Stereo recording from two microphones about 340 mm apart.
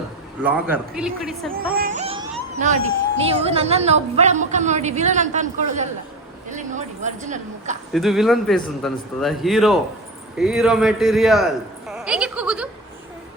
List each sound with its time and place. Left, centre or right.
0.4 s speech: centre
1.7 s a sound: right
3.2 s a woman's voice: centre
7.9 s a man's voice: centre